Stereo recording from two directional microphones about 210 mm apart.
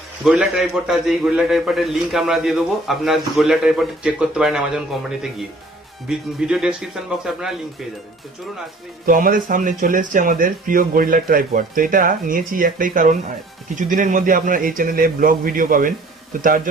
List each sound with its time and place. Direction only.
0.2 s a man's voice: centre (ahead or behind)
9.0 s speech: 40° right (ahead or behind)